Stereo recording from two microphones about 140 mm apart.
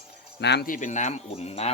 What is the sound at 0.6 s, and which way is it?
Speech, 70° left (ahead or behind).